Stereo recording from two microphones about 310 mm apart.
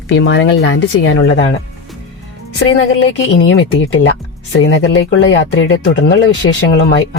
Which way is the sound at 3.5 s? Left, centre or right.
Left.